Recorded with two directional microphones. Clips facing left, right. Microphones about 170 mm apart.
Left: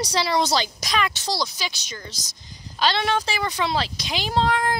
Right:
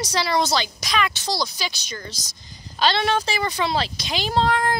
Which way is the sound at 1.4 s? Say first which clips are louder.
Right 1 dB; 20° left (ahead or behind).